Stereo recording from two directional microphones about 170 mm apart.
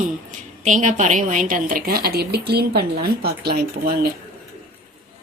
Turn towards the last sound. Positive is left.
turn(degrees=-65)  # may be behind; listen again after turning